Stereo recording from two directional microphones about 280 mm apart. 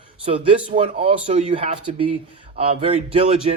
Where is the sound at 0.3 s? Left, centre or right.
Centre.